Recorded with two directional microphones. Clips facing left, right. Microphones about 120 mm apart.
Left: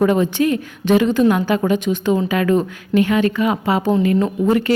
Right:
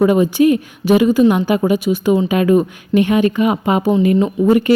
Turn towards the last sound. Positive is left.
turn(degrees=-15)  # may be behind; listen again after turning